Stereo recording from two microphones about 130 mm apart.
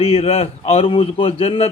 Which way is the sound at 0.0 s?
50° left (ahead or behind).